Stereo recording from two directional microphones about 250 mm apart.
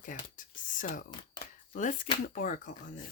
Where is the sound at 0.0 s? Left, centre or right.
Left.